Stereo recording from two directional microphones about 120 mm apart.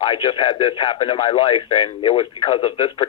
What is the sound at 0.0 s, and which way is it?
Speech, 40° left (ahead or behind).